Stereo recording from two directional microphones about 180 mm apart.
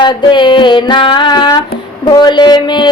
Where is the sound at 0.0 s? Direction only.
25° left (ahead or behind).